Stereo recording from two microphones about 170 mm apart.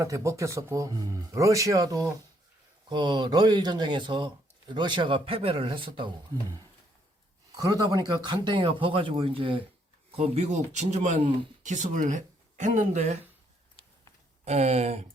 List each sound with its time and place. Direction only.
0.0 s speech: 20° right (ahead or behind)
7.5 s speech: 20° right (ahead or behind); by 13.1 s 45° right (ahead or behind)
14.4 s speech: 40° right (ahead or behind)